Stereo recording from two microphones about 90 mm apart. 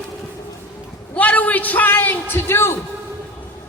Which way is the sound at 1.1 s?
15° left (ahead or behind).